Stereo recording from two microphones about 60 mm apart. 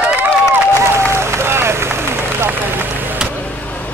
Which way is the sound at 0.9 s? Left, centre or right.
Right.